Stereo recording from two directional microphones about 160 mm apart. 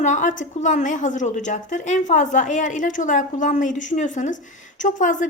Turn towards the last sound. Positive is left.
turn(degrees=55)  # may be behind; listen again after turning